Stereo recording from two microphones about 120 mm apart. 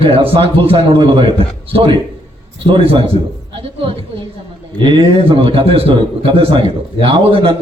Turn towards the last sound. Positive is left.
turn(degrees=-45)  # may be behind; listen again after turning